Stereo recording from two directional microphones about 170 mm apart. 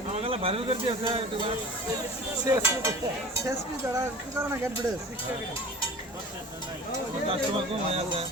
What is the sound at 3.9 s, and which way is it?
Speech, 15° right (ahead or behind).